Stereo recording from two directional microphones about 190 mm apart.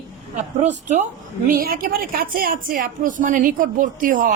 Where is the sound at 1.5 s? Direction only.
50° right (ahead or behind).